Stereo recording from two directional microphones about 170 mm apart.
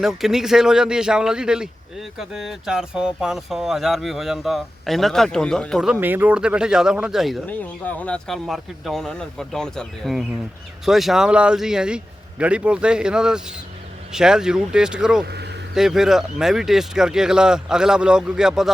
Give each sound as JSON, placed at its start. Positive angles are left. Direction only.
{"t": 0.0, "sound": "a man's voice", "side_deg": 0}
{"t": 7.4, "sound": "a man's voice", "side_deg": 10}
{"t": 15.2, "sound": "speech", "side_deg": -75}
{"t": 15.7, "sound": "a man's voice", "side_deg": -5}